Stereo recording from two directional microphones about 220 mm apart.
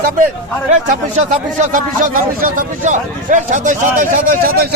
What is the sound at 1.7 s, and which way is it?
A man's voice, 35° right (ahead or behind).